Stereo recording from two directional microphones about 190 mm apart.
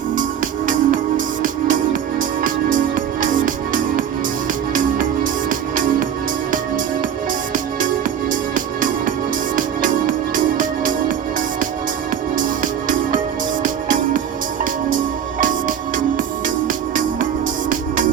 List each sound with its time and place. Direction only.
0.7 s music: 45° right (ahead or behind)
7.5 s music: 45° right (ahead or behind)
12.4 s music: 45° right (ahead or behind)